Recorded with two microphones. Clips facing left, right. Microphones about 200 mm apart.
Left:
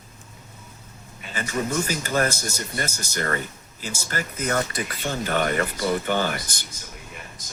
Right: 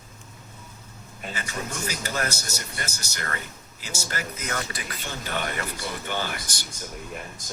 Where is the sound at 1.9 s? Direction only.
45° left (ahead or behind).